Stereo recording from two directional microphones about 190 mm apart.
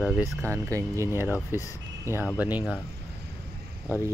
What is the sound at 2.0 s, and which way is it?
Speech, 15° right (ahead or behind).